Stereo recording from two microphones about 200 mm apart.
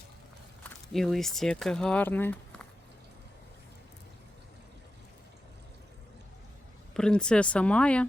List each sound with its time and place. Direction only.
0.6 s speech: centre (ahead or behind)
6.9 s speech: 5° left (ahead or behind)